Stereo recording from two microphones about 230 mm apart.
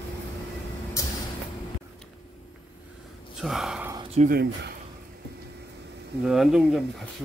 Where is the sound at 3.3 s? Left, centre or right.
Centre.